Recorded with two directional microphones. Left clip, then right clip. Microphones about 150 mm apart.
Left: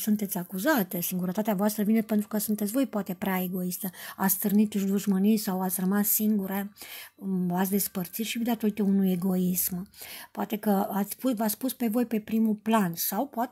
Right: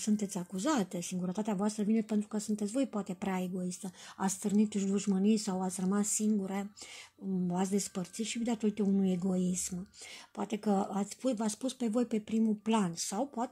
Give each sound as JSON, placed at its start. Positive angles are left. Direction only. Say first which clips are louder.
{"t": 0.0, "sound": "speech", "louder": "left 4 dB", "side_deg": 25}